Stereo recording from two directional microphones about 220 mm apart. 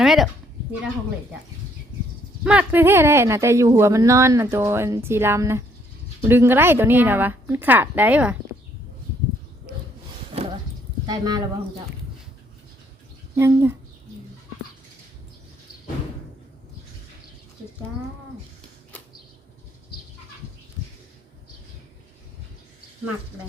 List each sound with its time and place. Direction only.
0.0 s speech: centre (ahead or behind)
2.4 s speech: 5° right (ahead or behind)
11.0 s speech: 20° right (ahead or behind)
13.3 s speech: 10° right (ahead or behind)